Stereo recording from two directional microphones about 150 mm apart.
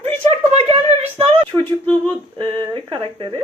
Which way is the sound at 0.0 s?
45° right (ahead or behind).